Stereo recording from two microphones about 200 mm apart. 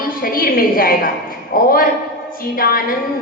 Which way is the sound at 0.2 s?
45° left (ahead or behind).